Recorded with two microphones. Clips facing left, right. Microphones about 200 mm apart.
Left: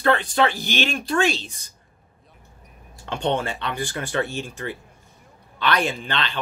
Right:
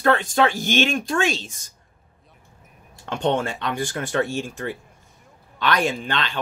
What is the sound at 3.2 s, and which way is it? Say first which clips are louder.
Speech: right 2 dB; 45° right (ahead or behind).